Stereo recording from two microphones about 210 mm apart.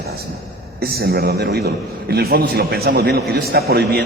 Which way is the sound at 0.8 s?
45° right (ahead or behind).